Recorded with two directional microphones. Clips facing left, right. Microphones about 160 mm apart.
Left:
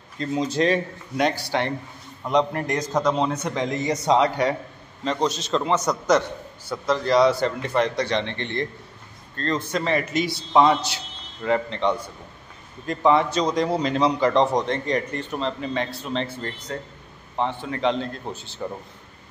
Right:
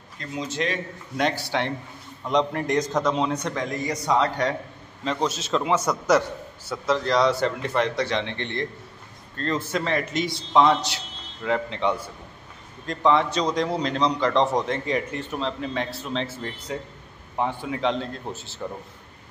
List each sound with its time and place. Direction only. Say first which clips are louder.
0.2 s speech: left 6 dB; 30° left (ahead or behind)
1.1 s a man's voice: left 2 dB; centre (ahead or behind)
3.5 s a man's voice: left 3 dB; 20° left (ahead or behind)
5.0 s a man's voice: left 2 dB; 5° right (ahead or behind)